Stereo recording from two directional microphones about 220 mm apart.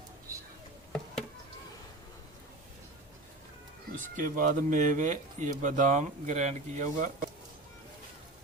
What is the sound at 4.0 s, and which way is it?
Speech, 35° right (ahead or behind).